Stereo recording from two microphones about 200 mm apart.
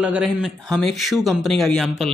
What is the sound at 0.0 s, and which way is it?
A man's voice, 5° right (ahead or behind).